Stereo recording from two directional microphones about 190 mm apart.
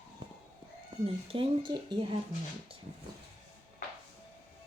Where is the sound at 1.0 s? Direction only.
30° right (ahead or behind).